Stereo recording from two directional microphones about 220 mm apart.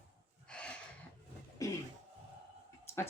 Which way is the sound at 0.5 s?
5° left (ahead or behind).